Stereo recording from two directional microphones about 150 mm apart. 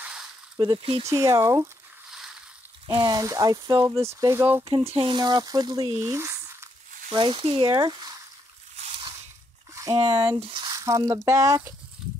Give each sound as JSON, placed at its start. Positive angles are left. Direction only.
{"t": 0.0, "sound": "a sound", "side_deg": -5}
{"t": 1.0, "sound": "speech", "side_deg": -20}
{"t": 2.0, "sound": "a sound", "side_deg": -5}
{"t": 2.9, "sound": "speech", "side_deg": -30}
{"t": 4.6, "sound": "speech", "side_deg": -40}
{"t": 7.1, "sound": "speech", "side_deg": -35}
{"t": 9.8, "sound": "speech", "side_deg": -25}